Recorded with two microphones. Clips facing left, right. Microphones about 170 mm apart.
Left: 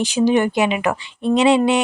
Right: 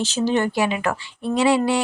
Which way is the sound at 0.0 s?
15° left (ahead or behind).